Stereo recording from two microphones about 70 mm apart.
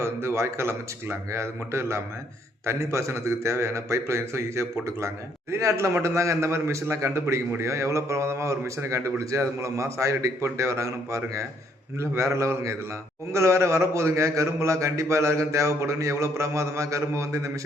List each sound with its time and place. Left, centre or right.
0.0 s a man's voice: right